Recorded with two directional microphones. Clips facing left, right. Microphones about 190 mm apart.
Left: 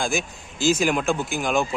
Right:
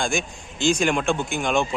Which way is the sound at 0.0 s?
5° left (ahead or behind).